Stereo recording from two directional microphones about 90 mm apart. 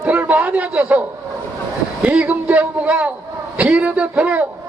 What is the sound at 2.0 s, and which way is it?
A man's voice, 15° right (ahead or behind).